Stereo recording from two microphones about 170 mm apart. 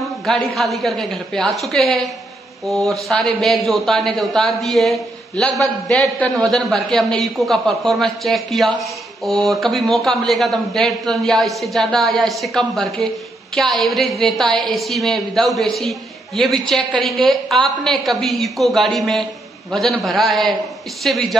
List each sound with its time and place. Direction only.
0.2 s speech: centre (ahead or behind)